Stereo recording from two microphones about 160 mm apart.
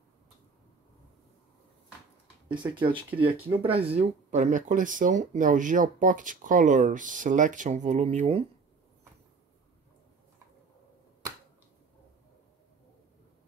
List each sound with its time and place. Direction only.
2.4 s speech: 30° right (ahead or behind)